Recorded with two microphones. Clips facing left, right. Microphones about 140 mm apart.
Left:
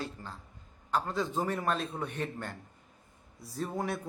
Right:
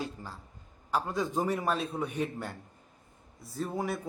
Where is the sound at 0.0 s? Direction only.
10° right (ahead or behind).